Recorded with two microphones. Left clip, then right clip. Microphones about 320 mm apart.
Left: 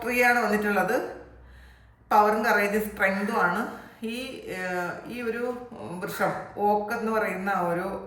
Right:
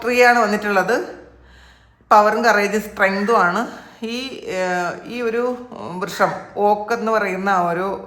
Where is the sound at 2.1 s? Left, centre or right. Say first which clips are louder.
Right 8 dB; centre.